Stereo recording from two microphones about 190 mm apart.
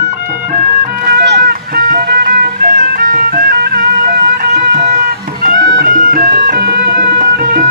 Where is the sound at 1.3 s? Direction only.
50° right (ahead or behind).